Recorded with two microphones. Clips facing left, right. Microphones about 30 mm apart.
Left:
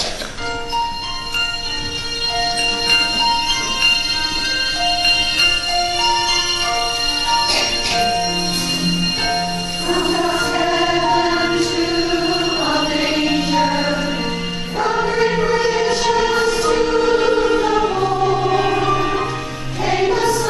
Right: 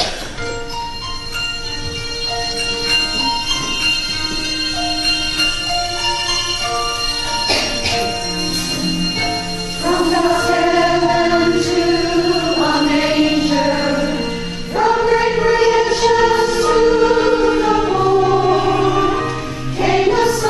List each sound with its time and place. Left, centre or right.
2.9 s music: centre
10.1 s music: centre
11.1 s music: centre
11.6 s music: centre
12.6 s music: centre
15.0 s choir: centre
15.4 s music: centre
16.9 s music: centre
19.8 s music: centre